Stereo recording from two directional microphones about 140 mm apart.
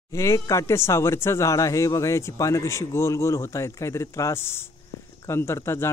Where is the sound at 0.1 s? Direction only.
20° left (ahead or behind).